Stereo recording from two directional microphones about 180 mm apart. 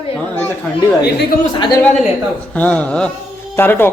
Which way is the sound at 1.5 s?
25° left (ahead or behind).